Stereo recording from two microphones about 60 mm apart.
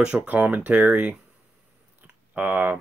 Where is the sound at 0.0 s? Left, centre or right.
Centre.